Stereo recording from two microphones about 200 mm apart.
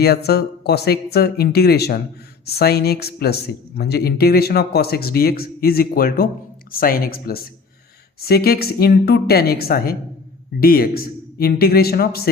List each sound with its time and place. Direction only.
0.0 s speech: 55° left (ahead or behind)